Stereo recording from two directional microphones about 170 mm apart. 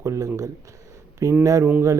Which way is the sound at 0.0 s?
15° right (ahead or behind).